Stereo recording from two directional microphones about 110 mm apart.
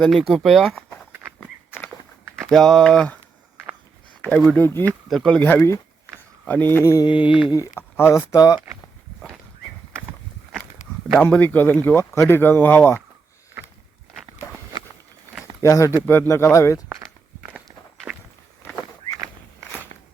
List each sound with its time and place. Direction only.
0.0 s speech: centre (ahead or behind)
2.5 s speech: centre (ahead or behind)
4.2 s speech: 10° left (ahead or behind)
4.6 s speech: 20° left (ahead or behind)
5.0 s speech: 5° left (ahead or behind); by 7.0 s 20° left (ahead or behind)
7.0 s mantra: 50° left (ahead or behind)
7.5 s speech: 25° left (ahead or behind)
11.2 s speech: 15° left (ahead or behind)
15.6 s speech: 30° left (ahead or behind)
19.9 s walk: 90° right